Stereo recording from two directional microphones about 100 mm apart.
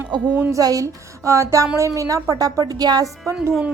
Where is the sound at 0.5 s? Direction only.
35° right (ahead or behind).